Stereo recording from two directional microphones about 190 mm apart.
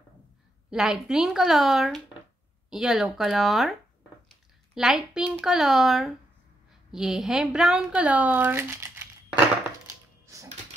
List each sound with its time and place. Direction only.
0.7 s a woman's voice: centre (ahead or behind)
4.7 s a woman's voice: 5° right (ahead or behind)
10.2 s music: 15° right (ahead or behind)